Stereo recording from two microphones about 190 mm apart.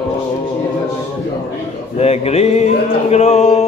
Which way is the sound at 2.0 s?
35° left (ahead or behind).